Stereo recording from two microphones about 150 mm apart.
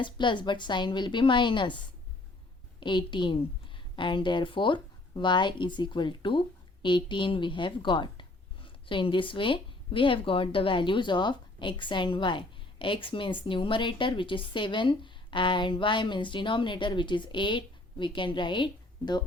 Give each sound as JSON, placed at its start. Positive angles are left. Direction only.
{"t": 0.0, "sound": "speech", "side_deg": 30}
{"t": 2.8, "sound": "speech", "side_deg": 30}